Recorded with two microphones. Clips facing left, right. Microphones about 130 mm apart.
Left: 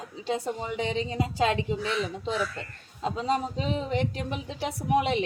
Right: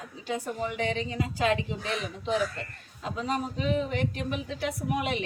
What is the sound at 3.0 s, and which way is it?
A woman's voice, 30° left (ahead or behind).